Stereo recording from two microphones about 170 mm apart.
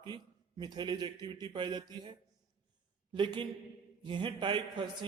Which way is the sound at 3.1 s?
30° right (ahead or behind).